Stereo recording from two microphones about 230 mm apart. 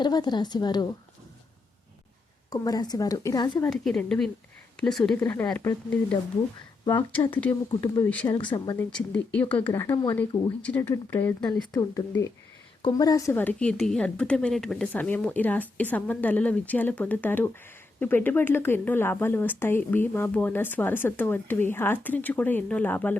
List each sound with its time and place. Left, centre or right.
0.0 s a woman's voice: centre
2.5 s a woman's voice: centre
3.7 s a woman's voice: centre
8.4 s a woman's voice: centre
11.7 s a woman's voice: centre